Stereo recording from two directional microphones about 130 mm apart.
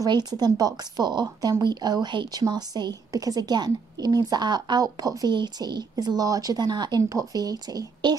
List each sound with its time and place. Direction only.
0.0 s speech: 30° right (ahead or behind)